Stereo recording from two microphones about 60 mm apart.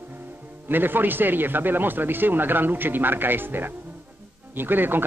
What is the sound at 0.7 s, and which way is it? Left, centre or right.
Speech, right.